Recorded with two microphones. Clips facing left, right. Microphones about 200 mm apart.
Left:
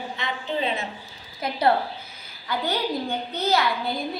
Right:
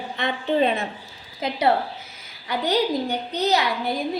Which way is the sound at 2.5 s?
20° right (ahead or behind).